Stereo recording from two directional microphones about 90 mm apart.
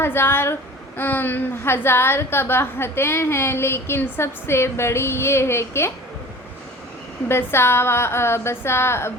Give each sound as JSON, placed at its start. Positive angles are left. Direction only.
{"t": 0.0, "sound": "a woman's voice", "side_deg": 25}
{"t": 7.3, "sound": "a woman's voice", "side_deg": 25}